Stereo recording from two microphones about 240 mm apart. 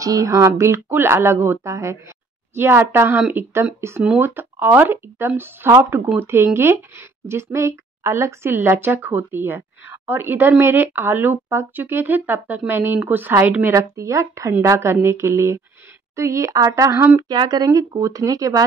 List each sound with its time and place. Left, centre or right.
0.0 s speech: centre